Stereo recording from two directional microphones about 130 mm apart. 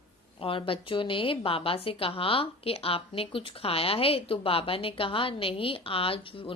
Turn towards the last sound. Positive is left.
turn(degrees=45)  # may be behind; listen again after turning